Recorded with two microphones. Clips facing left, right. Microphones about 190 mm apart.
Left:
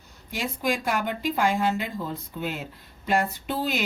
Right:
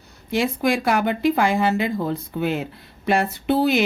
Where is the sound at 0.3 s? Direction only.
80° right.